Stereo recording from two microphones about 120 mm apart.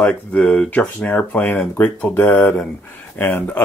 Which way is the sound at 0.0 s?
10° left (ahead or behind).